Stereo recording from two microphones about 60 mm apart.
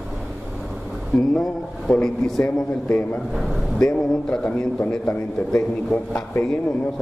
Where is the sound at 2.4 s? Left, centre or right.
Left.